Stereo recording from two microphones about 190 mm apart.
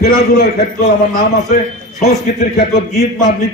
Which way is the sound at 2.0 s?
55° left (ahead or behind).